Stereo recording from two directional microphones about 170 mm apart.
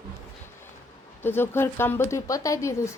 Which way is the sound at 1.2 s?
15° left (ahead or behind).